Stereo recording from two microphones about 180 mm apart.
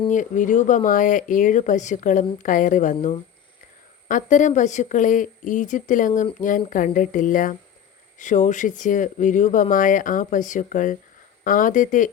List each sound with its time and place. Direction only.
0.1 s speech: 45° left (ahead or behind)